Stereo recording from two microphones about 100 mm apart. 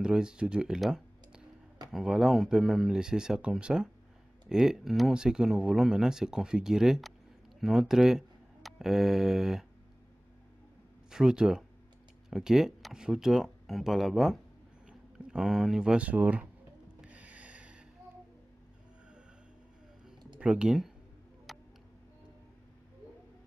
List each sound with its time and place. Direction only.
0.0 s speech: 10° right (ahead or behind)
11.1 s speech: 5° right (ahead or behind)
17.1 s a sound: 15° right (ahead or behind)
20.3 s speech: 10° right (ahead or behind)
21.5 s tick: centre (ahead or behind)